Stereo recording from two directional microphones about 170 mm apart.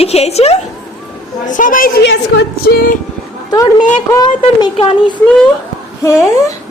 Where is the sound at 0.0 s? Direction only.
40° left (ahead or behind).